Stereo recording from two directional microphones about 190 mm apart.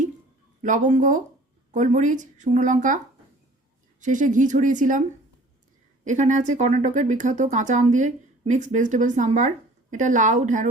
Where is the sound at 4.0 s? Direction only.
40° right (ahead or behind).